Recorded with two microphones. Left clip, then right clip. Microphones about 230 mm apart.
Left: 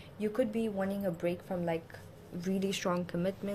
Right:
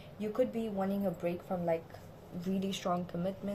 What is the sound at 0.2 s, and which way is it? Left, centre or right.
A woman's voice, left.